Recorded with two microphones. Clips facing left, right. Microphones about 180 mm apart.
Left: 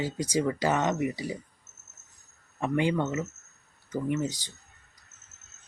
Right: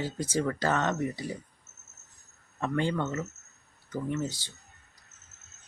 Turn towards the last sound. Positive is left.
turn(degrees=15)  # may be behind; listen again after turning